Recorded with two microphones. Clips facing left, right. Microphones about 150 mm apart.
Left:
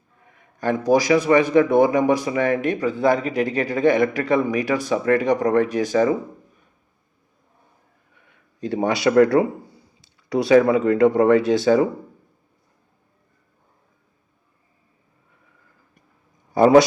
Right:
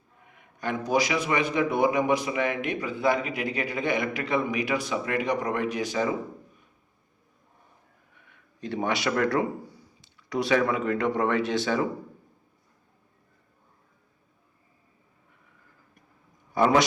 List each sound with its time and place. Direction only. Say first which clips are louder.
0.6 s speech: left 7 dB; 40° left (ahead or behind)
8.6 s speech: left 7 dB; 35° left (ahead or behind)
16.6 s speech: left 9 dB; 35° left (ahead or behind)